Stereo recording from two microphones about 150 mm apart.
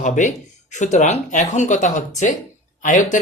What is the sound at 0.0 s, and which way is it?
Speech, 55° left (ahead or behind).